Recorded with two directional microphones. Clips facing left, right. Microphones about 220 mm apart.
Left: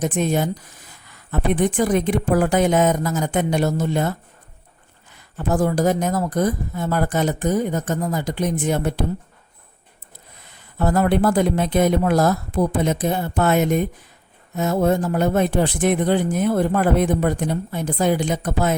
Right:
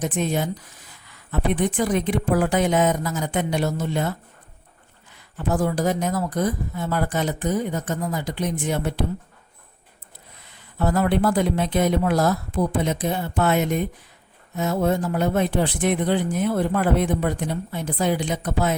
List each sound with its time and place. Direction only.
0.0 s speech: 45° left (ahead or behind)
5.4 s speech: 45° left (ahead or behind)
10.5 s speech: 45° left (ahead or behind)